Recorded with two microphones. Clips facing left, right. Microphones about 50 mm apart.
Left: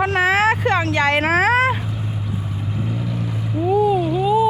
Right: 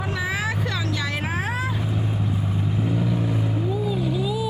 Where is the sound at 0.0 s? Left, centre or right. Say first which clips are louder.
Left 10 dB; left.